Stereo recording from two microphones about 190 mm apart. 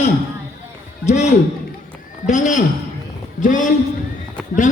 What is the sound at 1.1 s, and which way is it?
A man's voice, 40° left (ahead or behind).